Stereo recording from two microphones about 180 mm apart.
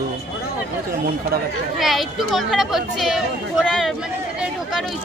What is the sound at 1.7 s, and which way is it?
Speech, centre (ahead or behind).